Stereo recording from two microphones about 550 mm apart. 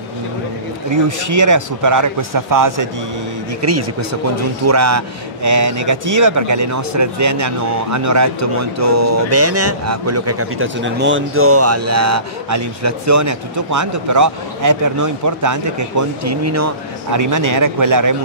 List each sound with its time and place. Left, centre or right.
0.9 s speech: right